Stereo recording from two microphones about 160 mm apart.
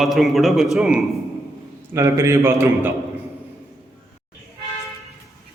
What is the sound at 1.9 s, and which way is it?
Speech, 15° right (ahead or behind).